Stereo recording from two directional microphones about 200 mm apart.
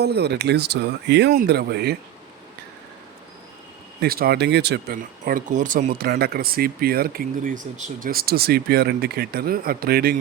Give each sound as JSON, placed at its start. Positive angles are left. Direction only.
{"t": 0.0, "sound": "speech", "side_deg": -55}
{"t": 4.0, "sound": "speech", "side_deg": -50}
{"t": 5.2, "sound": "speech", "side_deg": -40}